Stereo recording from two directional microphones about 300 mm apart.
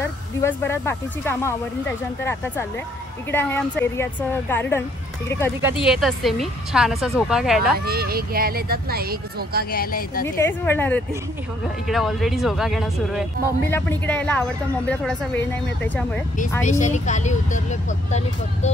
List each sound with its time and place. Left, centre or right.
0.4 s speech: centre
5.6 s a woman's voice: centre
7.8 s speech: right
9.7 s speech: left
10.2 s a woman's voice: centre
16.6 s speech: left